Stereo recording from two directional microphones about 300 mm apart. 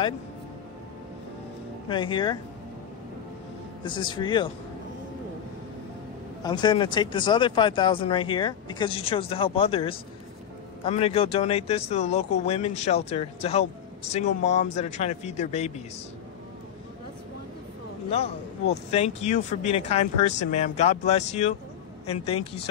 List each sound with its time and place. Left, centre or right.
1.9 s speech: centre
3.8 s speech: centre
6.4 s speech: centre
18.1 s speech: centre